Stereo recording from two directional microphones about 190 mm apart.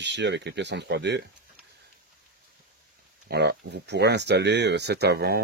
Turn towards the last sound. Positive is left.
turn(degrees=-60)  # may be behind; listen again after turning